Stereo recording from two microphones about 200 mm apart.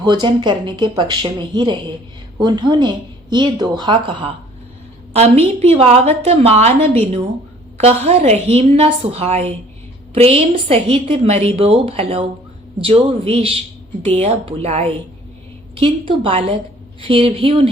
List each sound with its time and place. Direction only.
0.0 s a woman's voice: 20° right (ahead or behind)